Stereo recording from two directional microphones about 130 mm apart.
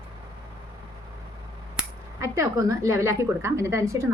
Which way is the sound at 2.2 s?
25° right (ahead or behind).